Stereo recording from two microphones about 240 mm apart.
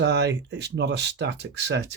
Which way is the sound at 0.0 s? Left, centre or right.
Right.